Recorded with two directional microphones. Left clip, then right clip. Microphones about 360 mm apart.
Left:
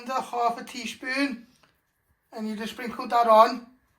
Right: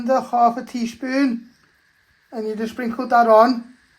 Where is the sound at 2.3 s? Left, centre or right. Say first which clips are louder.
Right 9 dB; right.